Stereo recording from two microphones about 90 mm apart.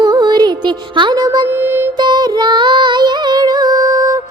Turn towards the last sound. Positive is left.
turn(degrees=-40)  # may be behind; listen again after turning